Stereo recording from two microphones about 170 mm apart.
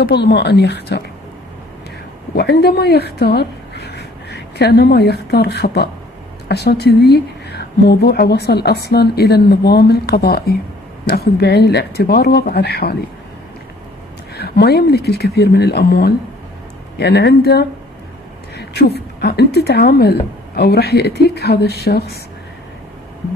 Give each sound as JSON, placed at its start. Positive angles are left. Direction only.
{"t": 0.1, "sound": "speech", "side_deg": 80}
{"t": 2.3, "sound": "a woman's voice", "side_deg": 70}
{"t": 14.3, "sound": "a woman's voice", "side_deg": 70}
{"t": 18.7, "sound": "a woman's voice", "side_deg": 75}